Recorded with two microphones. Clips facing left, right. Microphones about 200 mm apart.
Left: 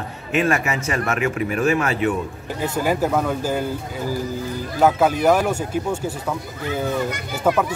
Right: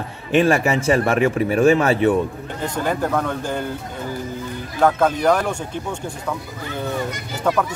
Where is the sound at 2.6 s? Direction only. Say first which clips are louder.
Left 2 dB; 5° left (ahead or behind).